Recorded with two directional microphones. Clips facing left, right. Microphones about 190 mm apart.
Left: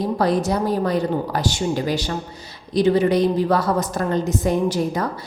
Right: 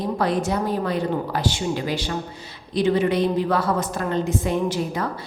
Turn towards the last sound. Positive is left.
turn(degrees=40)  # may be behind; listen again after turning